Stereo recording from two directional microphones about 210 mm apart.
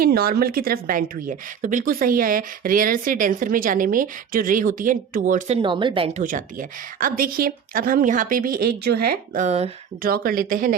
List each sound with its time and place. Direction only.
0.0 s a woman's voice: 45° right (ahead or behind)
5.6 s speech: 25° right (ahead or behind)
6.2 s a woman's voice: 40° right (ahead or behind)
10.0 s speech: 45° right (ahead or behind)